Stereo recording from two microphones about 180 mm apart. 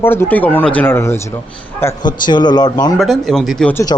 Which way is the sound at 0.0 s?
10° left (ahead or behind).